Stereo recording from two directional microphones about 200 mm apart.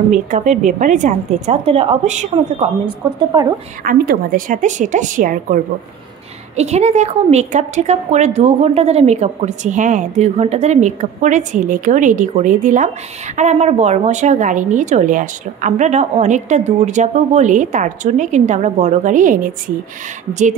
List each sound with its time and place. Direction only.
0.1 s a woman's voice: 35° right (ahead or behind)
3.0 s speech: 20° right (ahead or behind)
3.8 s a woman's voice: 45° right (ahead or behind)